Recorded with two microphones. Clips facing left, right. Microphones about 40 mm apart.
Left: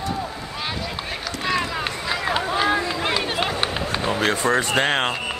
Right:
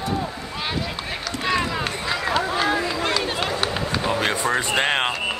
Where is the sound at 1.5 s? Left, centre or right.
Centre.